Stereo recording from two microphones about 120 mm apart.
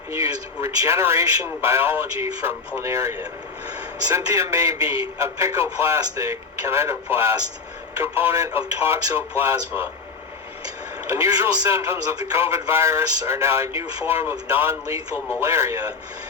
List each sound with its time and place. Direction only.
0.1 s speech: 25° right (ahead or behind)
11.1 s speech: 30° right (ahead or behind)